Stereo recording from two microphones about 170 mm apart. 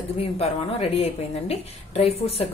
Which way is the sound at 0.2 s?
35° left (ahead or behind).